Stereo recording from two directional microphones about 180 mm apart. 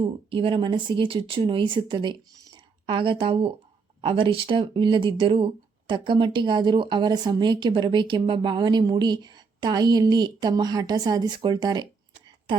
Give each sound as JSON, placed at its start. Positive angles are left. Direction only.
{"t": 0.0, "sound": "speech", "side_deg": -30}